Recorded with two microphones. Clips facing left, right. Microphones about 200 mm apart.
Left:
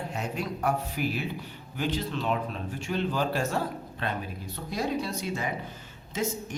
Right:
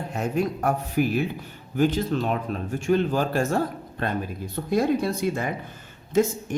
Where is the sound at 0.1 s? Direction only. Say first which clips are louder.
Right 7 dB; 50° right (ahead or behind).